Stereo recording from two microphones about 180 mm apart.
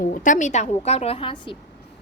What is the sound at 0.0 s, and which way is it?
A woman's voice, 45° left (ahead or behind).